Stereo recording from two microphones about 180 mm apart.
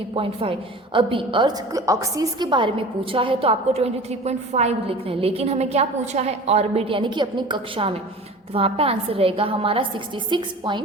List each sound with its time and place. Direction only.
0.1 s a woman's voice: 30° right (ahead or behind)